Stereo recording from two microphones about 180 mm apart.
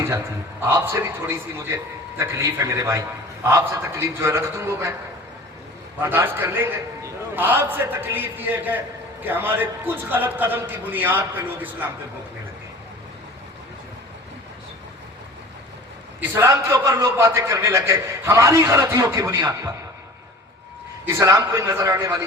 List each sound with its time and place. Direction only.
0.6 s a man's voice: 15° right (ahead or behind)
6.0 s a man's voice: 10° right (ahead or behind)
16.3 s a man's voice: 15° right (ahead or behind)
21.0 s a man's voice: 15° right (ahead or behind)